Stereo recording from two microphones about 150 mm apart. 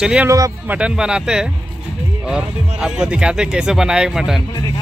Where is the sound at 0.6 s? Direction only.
10° right (ahead or behind).